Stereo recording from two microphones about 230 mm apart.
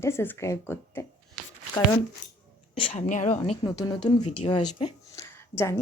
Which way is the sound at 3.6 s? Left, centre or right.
Centre.